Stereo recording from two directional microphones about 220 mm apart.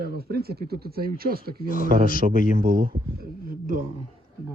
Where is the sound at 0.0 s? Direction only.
45° right (ahead or behind).